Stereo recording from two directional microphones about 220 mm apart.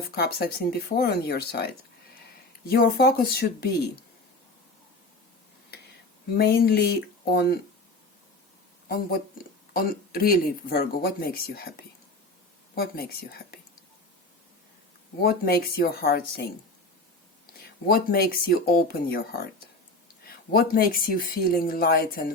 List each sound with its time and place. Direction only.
0.1 s speech: 45° left (ahead or behind)
6.3 s speech: 45° left (ahead or behind)
8.9 s speech: 45° left (ahead or behind)
12.7 s speech: 45° left (ahead or behind)
15.2 s speech: 45° left (ahead or behind)